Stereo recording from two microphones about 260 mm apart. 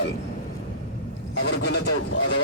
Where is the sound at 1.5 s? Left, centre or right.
Left.